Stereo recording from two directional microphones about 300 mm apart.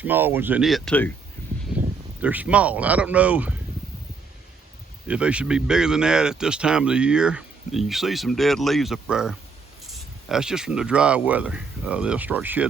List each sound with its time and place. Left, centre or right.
0.0 s speech: centre
1.7 s a sound: centre
2.2 s speech: centre
5.0 s speech: centre